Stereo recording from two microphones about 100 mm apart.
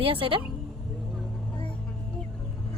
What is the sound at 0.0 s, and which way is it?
Speech, 65° right (ahead or behind).